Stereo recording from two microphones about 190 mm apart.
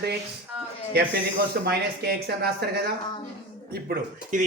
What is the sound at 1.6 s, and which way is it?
Speech, 60° right (ahead or behind).